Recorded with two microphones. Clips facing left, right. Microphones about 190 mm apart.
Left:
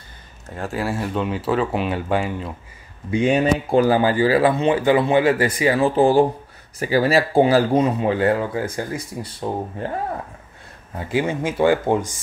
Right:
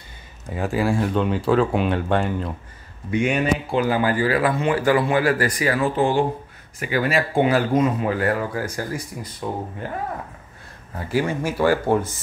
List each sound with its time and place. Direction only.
0.5 s speech: centre (ahead or behind)
3.1 s speech: 30° left (ahead or behind)
11.0 s speech: 20° left (ahead or behind)